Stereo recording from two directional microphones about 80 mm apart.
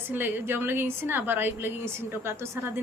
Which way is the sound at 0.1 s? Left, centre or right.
Right.